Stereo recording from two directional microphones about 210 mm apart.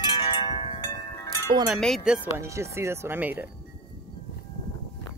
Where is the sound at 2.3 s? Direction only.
15° right (ahead or behind).